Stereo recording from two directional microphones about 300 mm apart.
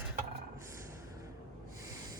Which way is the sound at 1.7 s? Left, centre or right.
Centre.